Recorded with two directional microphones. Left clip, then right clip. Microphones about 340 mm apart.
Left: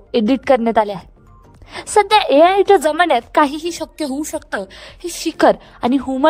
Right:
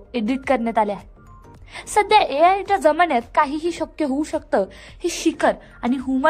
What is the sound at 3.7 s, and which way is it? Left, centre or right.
Speech, centre.